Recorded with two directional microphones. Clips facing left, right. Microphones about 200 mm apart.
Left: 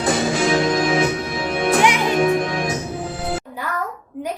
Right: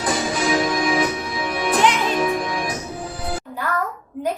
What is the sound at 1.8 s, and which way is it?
Music, 15° left (ahead or behind).